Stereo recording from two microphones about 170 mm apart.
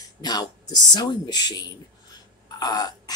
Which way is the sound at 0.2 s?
25° left (ahead or behind).